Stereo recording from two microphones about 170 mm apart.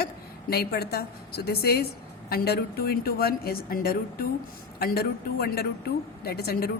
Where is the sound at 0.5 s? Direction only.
65° left (ahead or behind).